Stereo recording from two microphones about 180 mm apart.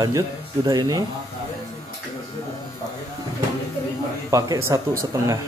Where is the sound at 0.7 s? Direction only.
20° right (ahead or behind).